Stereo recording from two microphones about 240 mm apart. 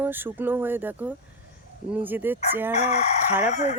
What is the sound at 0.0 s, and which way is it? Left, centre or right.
Speech, centre.